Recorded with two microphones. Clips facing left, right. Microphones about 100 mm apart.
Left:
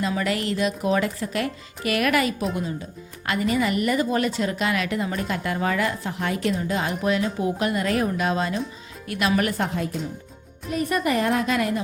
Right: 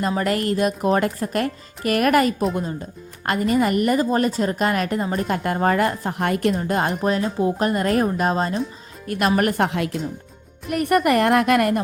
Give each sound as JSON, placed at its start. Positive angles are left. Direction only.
{"t": 0.1, "sound": "speech", "side_deg": -45}
{"t": 7.0, "sound": "speech", "side_deg": -35}
{"t": 9.6, "sound": "speech", "side_deg": -80}
{"t": 10.7, "sound": "a woman's voice", "side_deg": -60}